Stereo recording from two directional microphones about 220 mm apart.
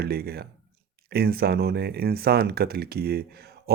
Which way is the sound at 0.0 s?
45° right (ahead or behind).